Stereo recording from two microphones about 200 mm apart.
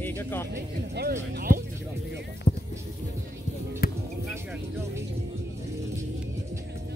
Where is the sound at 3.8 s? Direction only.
45° left (ahead or behind).